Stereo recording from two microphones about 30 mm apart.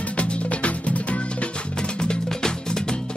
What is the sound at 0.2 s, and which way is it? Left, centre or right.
Music, left.